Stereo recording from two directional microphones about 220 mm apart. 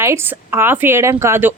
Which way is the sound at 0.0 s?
10° right (ahead or behind).